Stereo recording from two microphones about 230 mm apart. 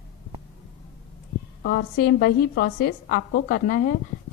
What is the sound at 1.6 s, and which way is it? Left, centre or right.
A woman's voice, left.